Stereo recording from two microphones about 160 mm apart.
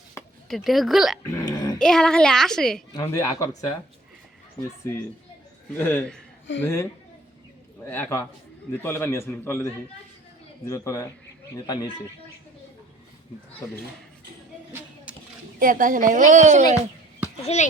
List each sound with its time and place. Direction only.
0.4 s a child's voice: centre (ahead or behind)
1.2 s speech: 20° left (ahead or behind)
1.8 s a child's voice: 5° left (ahead or behind)
2.9 s speech: 20° left (ahead or behind)
5.7 s a man's voice: 10° left (ahead or behind)
7.9 s a man's voice: 10° left (ahead or behind)
10.7 s speech: 20° left (ahead or behind)
15.1 s a sound: 10° right (ahead or behind)
15.5 s a woman's voice: 55° right (ahead or behind)
17.4 s a child's voice: 45° left (ahead or behind)